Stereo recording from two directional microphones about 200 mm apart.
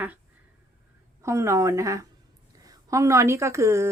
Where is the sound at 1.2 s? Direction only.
15° right (ahead or behind).